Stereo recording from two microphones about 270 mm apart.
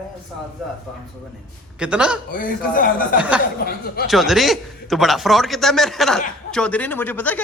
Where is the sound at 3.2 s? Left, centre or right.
Centre.